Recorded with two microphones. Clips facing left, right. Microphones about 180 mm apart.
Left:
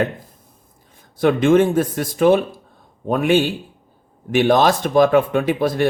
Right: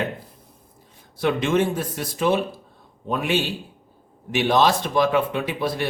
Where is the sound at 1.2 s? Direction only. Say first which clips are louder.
Left 7 dB; 50° left (ahead or behind).